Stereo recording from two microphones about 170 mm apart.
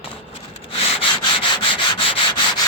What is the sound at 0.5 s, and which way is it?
Sanding, 30° left (ahead or behind).